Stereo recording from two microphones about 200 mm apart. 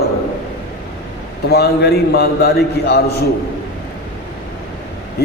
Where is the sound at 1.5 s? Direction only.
55° left (ahead or behind).